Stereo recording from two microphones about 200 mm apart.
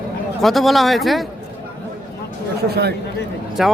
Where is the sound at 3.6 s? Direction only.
Centre (ahead or behind).